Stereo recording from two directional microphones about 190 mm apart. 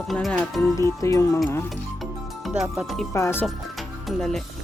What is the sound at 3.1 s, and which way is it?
Speech, 15° left (ahead or behind).